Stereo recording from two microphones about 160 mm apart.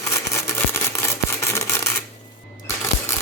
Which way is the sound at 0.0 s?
20° left (ahead or behind).